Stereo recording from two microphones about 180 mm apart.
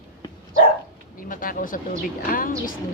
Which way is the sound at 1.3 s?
50° left (ahead or behind).